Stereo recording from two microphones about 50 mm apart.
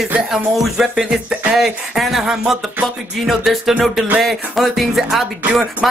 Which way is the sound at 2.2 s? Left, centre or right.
Centre.